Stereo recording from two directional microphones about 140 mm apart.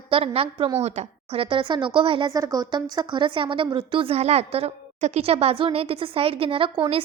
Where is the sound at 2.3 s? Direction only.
25° right (ahead or behind).